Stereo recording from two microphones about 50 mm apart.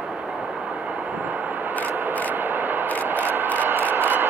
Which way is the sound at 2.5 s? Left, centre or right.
Right.